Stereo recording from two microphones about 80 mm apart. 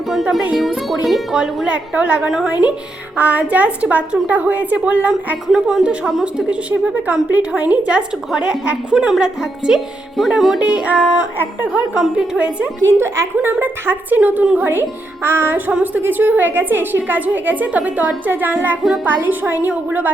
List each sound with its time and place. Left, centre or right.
0.1 s a woman's voice: centre
5.5 s a woman's voice: centre
10.6 s a woman's voice: centre
12.8 s a woman's voice: right; by 14.7 s centre
14.7 s a woman's voice: right